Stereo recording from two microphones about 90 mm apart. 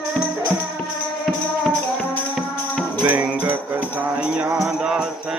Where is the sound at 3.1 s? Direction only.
15° right (ahead or behind).